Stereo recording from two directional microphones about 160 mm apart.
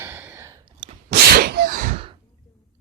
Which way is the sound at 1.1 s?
80° right.